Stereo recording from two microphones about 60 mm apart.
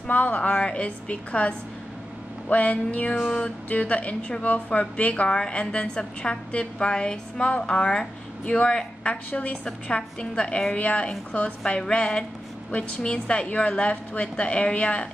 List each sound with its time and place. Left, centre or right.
0.0 s a woman's voice: left